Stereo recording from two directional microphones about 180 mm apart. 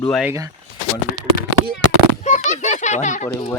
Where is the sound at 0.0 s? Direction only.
Centre (ahead or behind).